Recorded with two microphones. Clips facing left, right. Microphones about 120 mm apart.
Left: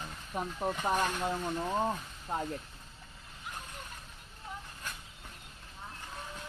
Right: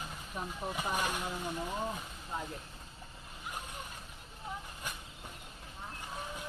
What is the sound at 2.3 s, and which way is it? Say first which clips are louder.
Speech: left 5 dB; 55° left (ahead or behind).